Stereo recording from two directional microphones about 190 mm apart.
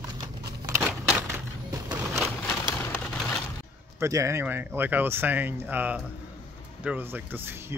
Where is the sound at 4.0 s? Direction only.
15° right (ahead or behind).